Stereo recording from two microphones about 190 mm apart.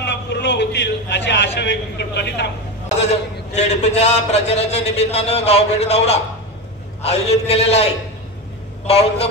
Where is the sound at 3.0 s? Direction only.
35° left (ahead or behind).